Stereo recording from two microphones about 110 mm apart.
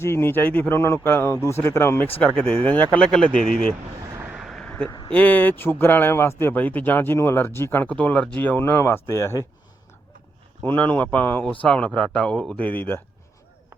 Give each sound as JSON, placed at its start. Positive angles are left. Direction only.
{"t": 0.0, "sound": "speech", "side_deg": 20}
{"t": 4.4, "sound": "a sound", "side_deg": 0}
{"t": 5.1, "sound": "speech", "side_deg": 15}
{"t": 10.6, "sound": "speech", "side_deg": 15}